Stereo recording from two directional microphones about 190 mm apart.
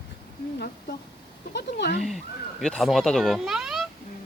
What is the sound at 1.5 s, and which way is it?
Speech, 60° left (ahead or behind).